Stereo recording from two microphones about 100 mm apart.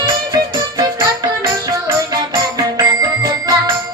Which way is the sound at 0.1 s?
40° right (ahead or behind).